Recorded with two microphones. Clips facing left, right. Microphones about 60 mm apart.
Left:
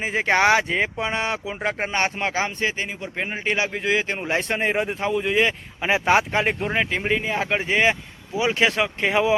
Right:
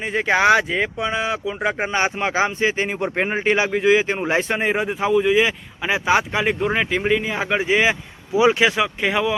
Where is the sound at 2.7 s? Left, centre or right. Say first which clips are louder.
Right 7 dB; right; by 4.6 s centre.